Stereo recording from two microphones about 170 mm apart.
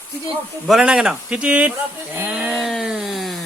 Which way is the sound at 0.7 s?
5° right (ahead or behind).